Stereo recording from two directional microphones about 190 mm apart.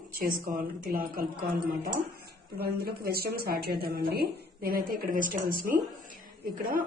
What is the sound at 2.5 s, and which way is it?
A woman's voice, 55° right (ahead or behind).